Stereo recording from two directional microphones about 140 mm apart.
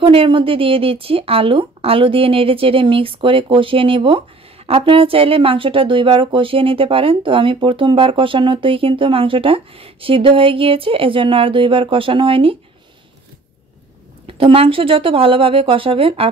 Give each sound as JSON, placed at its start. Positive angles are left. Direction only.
{"t": 0.0, "sound": "speech", "side_deg": -40}
{"t": 14.2, "sound": "speech", "side_deg": -40}